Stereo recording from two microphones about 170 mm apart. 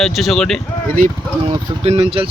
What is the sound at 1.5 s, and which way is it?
Speech, 35° right (ahead or behind).